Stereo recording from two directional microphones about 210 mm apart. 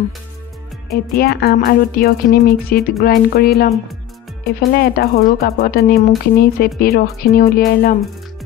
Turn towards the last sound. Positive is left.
turn(degrees=45)  # may be behind; listen again after turning